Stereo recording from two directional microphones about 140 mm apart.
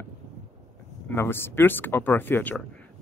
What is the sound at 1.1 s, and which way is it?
A man's voice, 15° left (ahead or behind).